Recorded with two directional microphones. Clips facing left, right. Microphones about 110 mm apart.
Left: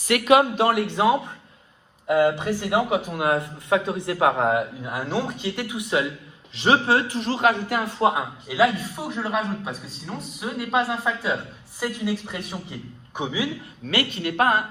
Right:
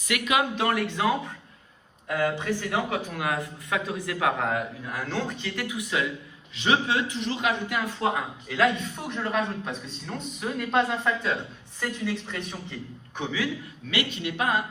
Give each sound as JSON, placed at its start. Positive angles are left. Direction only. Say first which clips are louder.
{"t": 0.0, "sound": "speech", "louder": "left 8 dB", "side_deg": 45}
{"t": 0.6, "sound": "a man's voice", "louder": "left 5 dB", "side_deg": 25}
{"t": 8.0, "sound": "a man's voice", "louder": "left 7 dB", "side_deg": 15}
{"t": 13.9, "sound": "speech", "louder": "left 5 dB", "side_deg": 50}